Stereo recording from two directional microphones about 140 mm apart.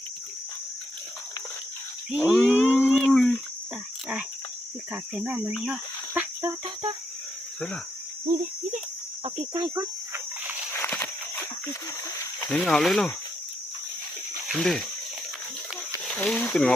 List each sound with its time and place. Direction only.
2.0 s cricket: 10° right (ahead or behind)
2.6 s a sound: 5° right (ahead or behind)
4.9 s cricket: 10° right (ahead or behind)
9.5 s cricket: 25° right (ahead or behind)
10.8 s horse: 15° left (ahead or behind)
12.5 s speech: 5° left (ahead or behind)
14.4 s speech: centre (ahead or behind)
16.1 s speech: 10° left (ahead or behind)